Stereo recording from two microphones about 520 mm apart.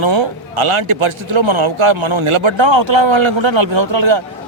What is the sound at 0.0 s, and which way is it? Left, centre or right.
A man's voice, right.